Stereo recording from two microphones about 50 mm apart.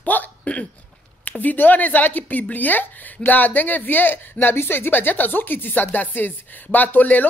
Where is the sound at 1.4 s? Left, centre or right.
Left.